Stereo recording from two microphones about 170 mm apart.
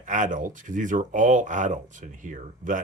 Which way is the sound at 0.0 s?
50° right (ahead or behind).